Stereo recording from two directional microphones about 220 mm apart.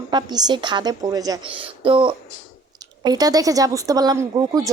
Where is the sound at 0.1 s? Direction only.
20° right (ahead or behind).